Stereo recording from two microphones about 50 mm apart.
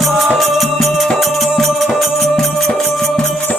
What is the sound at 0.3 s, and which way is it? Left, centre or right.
Music, centre.